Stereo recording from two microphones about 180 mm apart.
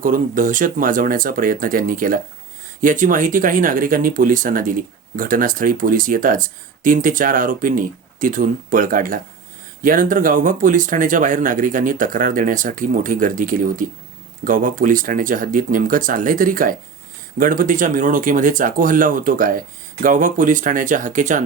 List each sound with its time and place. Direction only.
0.0 s speech: 50° right (ahead or behind)